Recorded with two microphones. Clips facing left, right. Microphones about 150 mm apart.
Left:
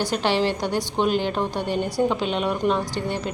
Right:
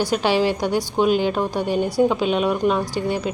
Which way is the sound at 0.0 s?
10° right (ahead or behind).